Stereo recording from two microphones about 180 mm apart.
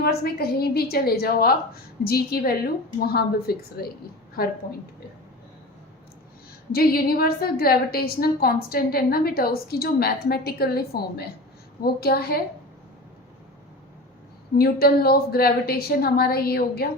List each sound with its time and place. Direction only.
0.0 s a woman's voice: 60° left (ahead or behind)
6.7 s a woman's voice: 55° left (ahead or behind)
14.6 s a woman's voice: 60° left (ahead or behind)